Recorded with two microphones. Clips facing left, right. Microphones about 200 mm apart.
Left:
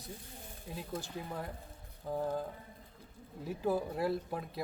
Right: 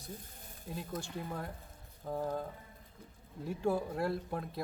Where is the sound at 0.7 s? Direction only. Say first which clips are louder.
Right 1 dB; centre (ahead or behind).